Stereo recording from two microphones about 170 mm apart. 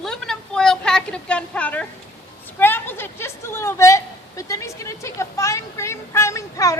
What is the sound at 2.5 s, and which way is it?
A woman's voice, 10° left (ahead or behind).